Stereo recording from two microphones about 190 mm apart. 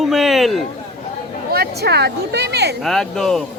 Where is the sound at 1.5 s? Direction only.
55° right (ahead or behind).